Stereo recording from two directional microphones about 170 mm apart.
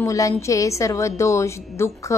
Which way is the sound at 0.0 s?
20° left (ahead or behind).